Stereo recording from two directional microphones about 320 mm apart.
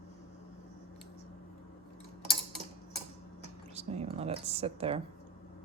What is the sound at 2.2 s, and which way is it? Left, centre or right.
Tick-tock, centre.